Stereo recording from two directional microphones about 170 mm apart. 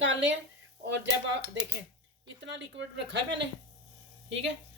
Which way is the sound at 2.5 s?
90° right.